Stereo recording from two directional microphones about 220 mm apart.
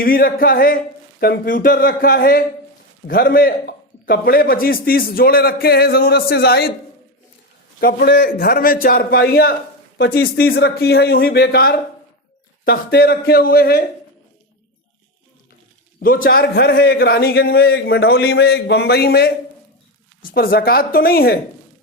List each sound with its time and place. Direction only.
0.0 s a man's voice: 40° left (ahead or behind)
7.8 s a man's voice: 45° left (ahead or behind)
16.0 s a man's voice: 40° left (ahead or behind)
20.3 s a man's voice: 40° left (ahead or behind)